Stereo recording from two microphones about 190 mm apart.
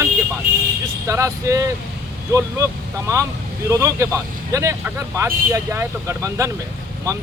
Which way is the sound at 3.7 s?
15° right (ahead or behind).